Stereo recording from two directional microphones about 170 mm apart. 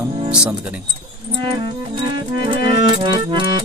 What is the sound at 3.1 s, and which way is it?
Music, 30° right (ahead or behind).